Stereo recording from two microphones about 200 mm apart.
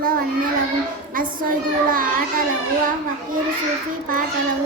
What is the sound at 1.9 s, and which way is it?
Speech, 45° right (ahead or behind).